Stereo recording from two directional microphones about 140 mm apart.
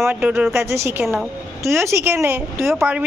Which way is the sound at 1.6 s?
20° right (ahead or behind).